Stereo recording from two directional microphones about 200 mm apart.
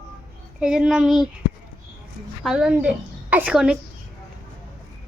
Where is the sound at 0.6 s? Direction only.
5° right (ahead or behind).